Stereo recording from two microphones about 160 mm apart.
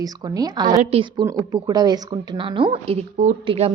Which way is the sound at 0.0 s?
25° right (ahead or behind).